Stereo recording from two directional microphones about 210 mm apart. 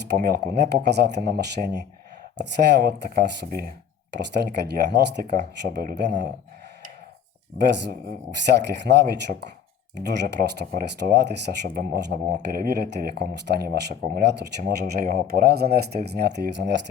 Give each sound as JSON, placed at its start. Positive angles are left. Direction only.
{"t": 0.3, "sound": "speech", "side_deg": -50}
{"t": 7.7, "sound": "speech", "side_deg": -55}